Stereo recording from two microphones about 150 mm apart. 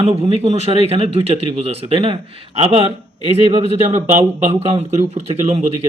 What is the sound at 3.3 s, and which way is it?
Speech, 45° right (ahead or behind).